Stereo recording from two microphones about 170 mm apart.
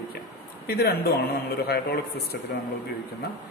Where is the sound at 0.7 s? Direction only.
65° left (ahead or behind).